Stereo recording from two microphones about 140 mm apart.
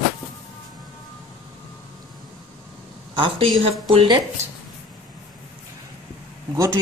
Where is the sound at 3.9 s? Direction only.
40° right (ahead or behind).